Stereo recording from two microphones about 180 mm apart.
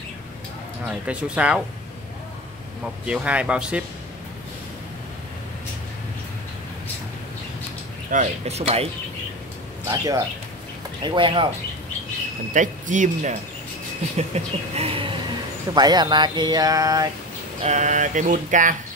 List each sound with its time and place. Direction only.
0.8 s speech: 5° right (ahead or behind)
3.1 s speech: 5° right (ahead or behind)
8.1 s speech: 40° right (ahead or behind)
9.8 s speech: 20° right (ahead or behind)
12.5 s a sound: 45° right (ahead or behind)
14.1 s speech: 35° right (ahead or behind); by 17.1 s 20° right (ahead or behind)
17.6 s a sound: 40° right (ahead or behind)